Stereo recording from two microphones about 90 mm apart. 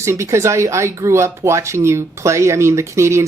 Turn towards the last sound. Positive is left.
turn(degrees=-30)  # may be behind; listen again after turning